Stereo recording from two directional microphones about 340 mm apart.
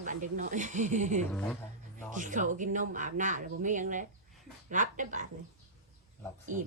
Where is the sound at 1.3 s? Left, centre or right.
Centre.